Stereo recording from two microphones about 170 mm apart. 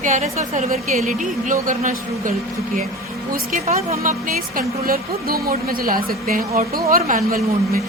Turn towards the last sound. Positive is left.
turn(degrees=-55)  # may be behind; listen again after turning